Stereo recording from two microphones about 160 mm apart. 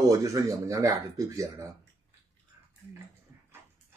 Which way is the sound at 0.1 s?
20° right (ahead or behind).